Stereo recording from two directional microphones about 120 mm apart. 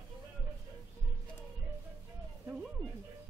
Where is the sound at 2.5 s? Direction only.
5° right (ahead or behind).